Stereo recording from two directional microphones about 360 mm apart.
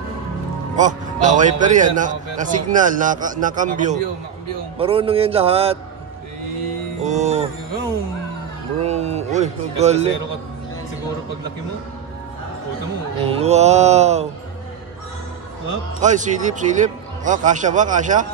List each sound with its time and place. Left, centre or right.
0.7 s a man's voice: right
7.0 s music: centre
8.7 s speech: centre
13.2 s speech: centre
16.0 s a man's voice: centre